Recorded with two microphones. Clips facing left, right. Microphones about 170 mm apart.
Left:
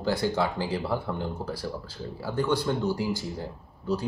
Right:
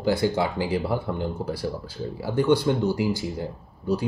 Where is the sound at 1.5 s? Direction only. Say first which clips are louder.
Right 4 dB; 60° right (ahead or behind).